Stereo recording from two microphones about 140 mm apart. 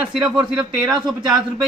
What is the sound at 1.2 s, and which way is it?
Speech, 30° right (ahead or behind).